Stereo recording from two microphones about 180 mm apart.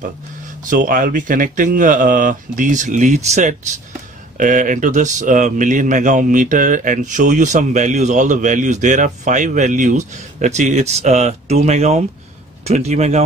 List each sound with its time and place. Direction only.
0.7 s speech: 50° right (ahead or behind)